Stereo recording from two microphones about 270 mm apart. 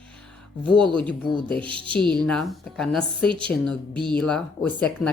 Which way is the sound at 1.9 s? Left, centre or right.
Centre.